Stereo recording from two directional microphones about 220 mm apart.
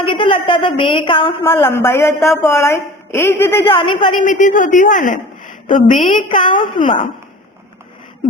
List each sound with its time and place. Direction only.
0.0 s a woman's voice: 25° left (ahead or behind)
1.5 s a woman's voice: 10° left (ahead or behind)
3.7 s a woman's voice: 25° left (ahead or behind)
4.1 s a woman's voice: 35° left (ahead or behind)
6.2 s a woman's voice: 20° left (ahead or behind)